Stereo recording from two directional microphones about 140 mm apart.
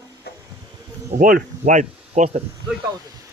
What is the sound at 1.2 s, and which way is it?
Speech, 70° right (ahead or behind).